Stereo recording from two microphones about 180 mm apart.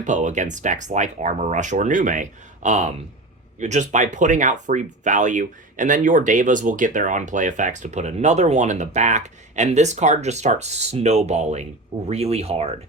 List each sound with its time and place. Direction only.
0.0 s speech: 45° right (ahead or behind)